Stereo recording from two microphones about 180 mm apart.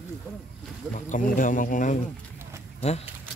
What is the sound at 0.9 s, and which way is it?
Speech, 45° left (ahead or behind).